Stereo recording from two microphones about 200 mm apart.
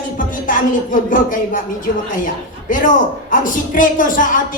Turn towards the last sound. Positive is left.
turn(degrees=40)  # may be behind; listen again after turning